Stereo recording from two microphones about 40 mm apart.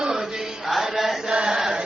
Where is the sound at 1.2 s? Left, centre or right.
Centre.